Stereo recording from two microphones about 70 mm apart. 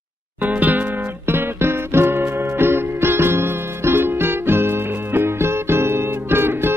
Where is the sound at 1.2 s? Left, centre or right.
Right.